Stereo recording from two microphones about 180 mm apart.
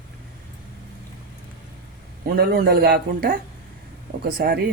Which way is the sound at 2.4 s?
60° right (ahead or behind).